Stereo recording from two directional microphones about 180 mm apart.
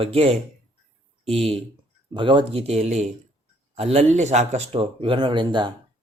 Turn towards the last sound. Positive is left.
turn(degrees=-25)  # may be behind; listen again after turning